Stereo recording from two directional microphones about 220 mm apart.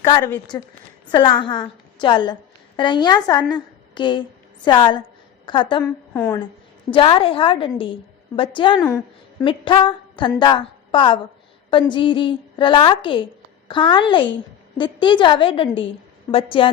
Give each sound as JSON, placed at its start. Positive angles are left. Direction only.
{"t": 0.0, "sound": "a woman's voice", "side_deg": 15}
{"t": 6.9, "sound": "a woman's voice", "side_deg": 25}